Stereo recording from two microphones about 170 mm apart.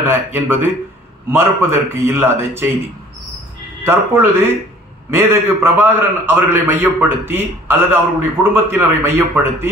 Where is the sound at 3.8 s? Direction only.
15° right (ahead or behind).